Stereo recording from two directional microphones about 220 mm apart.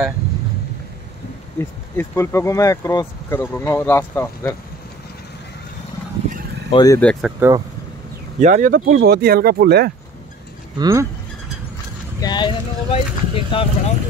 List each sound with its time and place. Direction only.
1.6 s speech: 10° left (ahead or behind)
6.7 s speech: 15° left (ahead or behind)
7.0 s speech: centre (ahead or behind)
7.3 s speech: 10° right (ahead or behind)
8.4 s speech: 35° right (ahead or behind)
10.8 s speech: 15° right (ahead or behind)
12.2 s speech: 20° left (ahead or behind)